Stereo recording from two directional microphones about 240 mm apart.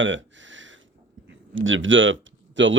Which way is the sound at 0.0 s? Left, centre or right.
Right.